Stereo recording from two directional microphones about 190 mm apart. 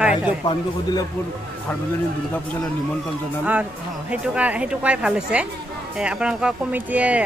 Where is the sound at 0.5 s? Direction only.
20° left (ahead or behind).